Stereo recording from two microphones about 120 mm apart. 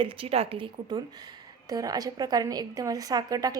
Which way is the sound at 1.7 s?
30° right (ahead or behind).